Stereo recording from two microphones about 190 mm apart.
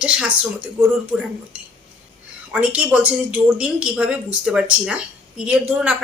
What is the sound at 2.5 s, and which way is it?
A woman's voice, 5° right (ahead or behind).